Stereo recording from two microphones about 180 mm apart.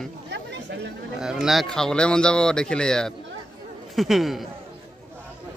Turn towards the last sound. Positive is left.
turn(degrees=0)  # may be behind; listen again after turning